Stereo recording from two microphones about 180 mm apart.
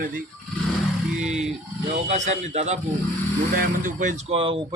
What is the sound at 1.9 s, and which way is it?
Speech, 40° right (ahead or behind).